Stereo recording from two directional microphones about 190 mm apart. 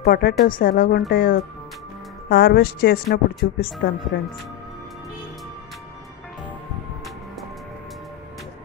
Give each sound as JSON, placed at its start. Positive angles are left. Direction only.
{"t": 0.0, "sound": "a woman's voice", "side_deg": 50}